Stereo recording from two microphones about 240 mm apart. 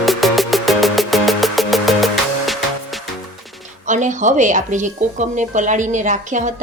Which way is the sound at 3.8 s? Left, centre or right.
Right.